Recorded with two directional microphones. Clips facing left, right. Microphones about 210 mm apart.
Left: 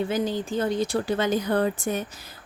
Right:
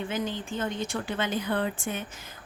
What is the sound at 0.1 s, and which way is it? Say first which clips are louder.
Speech: left 6 dB; 40° left (ahead or behind).